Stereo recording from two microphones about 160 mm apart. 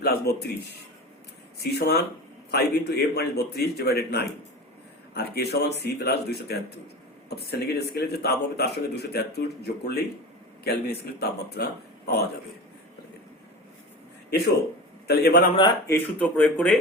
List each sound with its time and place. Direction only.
0.0 s a man's voice: 90° left
15.0 s a man's voice: 90° left
15.9 s speech: 10° left (ahead or behind)